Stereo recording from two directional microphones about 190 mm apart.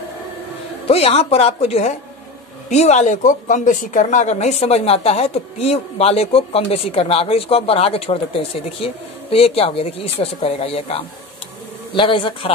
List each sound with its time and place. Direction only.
0.8 s a woman's voice: 30° left (ahead or behind)